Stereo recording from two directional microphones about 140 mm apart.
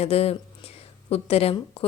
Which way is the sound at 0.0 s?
45° left (ahead or behind).